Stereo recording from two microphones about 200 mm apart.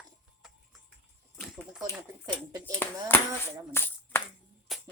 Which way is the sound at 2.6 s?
10° left (ahead or behind).